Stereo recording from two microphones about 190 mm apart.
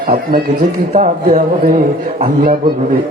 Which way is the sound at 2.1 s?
35° right (ahead or behind).